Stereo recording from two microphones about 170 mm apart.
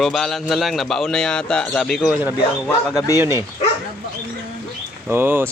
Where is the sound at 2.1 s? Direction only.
10° right (ahead or behind).